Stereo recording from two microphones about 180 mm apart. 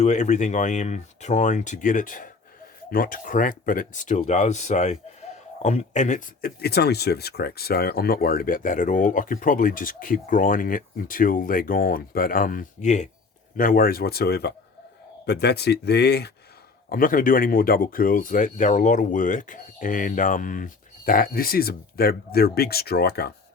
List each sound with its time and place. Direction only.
0.0 s speech: 40° left (ahead or behind)
13.6 s speech: 50° left (ahead or behind)
16.9 s speech: 50° left (ahead or behind)